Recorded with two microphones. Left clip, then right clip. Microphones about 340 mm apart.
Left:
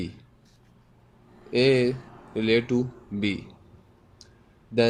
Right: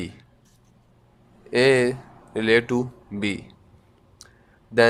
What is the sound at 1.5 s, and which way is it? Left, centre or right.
Speech, centre.